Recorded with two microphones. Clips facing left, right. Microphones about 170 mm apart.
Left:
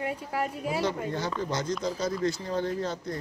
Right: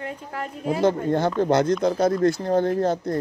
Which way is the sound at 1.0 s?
55° right (ahead or behind).